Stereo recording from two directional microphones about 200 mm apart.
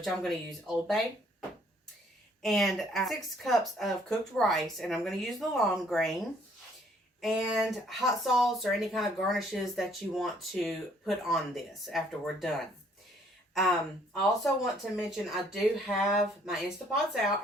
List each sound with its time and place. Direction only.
0.0 s speech: centre (ahead or behind)